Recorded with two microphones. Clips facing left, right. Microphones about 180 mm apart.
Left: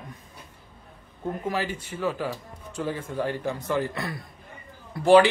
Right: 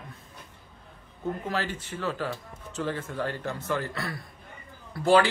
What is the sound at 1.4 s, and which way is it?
A man's voice, 10° left (ahead or behind).